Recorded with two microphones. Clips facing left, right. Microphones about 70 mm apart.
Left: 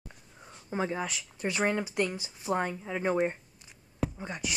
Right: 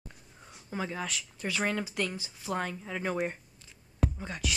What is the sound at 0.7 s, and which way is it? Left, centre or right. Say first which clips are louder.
Speech: left 3 dB; left.